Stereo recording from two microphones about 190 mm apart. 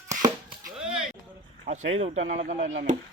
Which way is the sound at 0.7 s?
5° right (ahead or behind).